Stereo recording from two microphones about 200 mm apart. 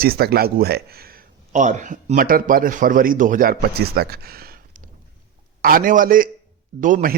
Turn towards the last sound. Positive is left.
turn(degrees=-40)  # may be behind; listen again after turning